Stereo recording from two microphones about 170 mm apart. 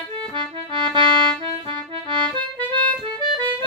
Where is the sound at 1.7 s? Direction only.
25° right (ahead or behind).